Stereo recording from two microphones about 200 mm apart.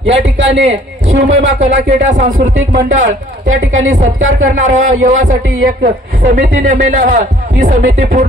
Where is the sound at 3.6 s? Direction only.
75° right (ahead or behind).